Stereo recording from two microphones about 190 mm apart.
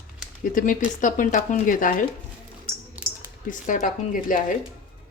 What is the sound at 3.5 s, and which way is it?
Speech, 45° left (ahead or behind).